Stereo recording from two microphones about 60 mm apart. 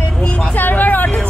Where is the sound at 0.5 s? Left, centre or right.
Left.